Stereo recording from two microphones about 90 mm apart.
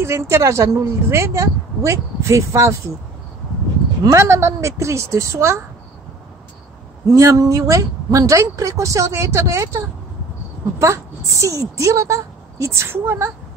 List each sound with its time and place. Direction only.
0.0 s speech: 30° right (ahead or behind)
4.1 s speech: 30° right (ahead or behind)
7.1 s a woman's voice: 40° right (ahead or behind)